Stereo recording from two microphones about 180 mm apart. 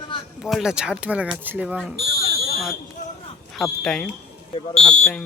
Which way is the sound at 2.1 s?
55° left (ahead or behind).